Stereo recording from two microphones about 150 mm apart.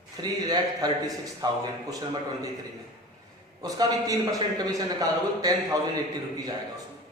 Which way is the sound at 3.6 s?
25° right (ahead or behind).